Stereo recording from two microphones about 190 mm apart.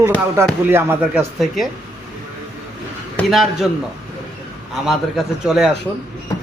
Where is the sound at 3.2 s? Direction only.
Centre (ahead or behind).